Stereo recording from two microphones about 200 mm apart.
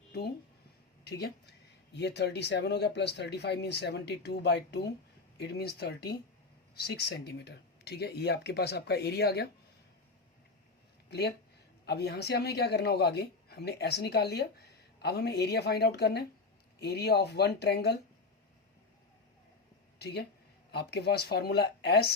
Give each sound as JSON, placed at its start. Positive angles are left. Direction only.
{"t": 1.0, "sound": "speech", "side_deg": 55}
{"t": 11.1, "sound": "speech", "side_deg": 55}
{"t": 20.0, "sound": "speech", "side_deg": 55}